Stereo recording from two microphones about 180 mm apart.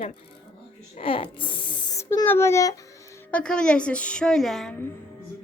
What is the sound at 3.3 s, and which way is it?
A woman's voice, 5° left (ahead or behind).